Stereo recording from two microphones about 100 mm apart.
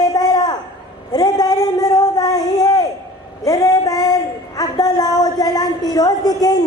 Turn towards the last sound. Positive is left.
turn(degrees=40)  # may be behind; listen again after turning